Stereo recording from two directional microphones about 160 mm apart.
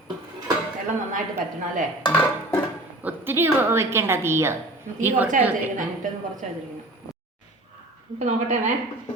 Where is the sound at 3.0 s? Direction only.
10° right (ahead or behind).